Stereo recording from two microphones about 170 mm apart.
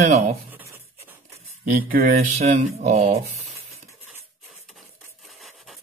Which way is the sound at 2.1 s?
40° right (ahead or behind).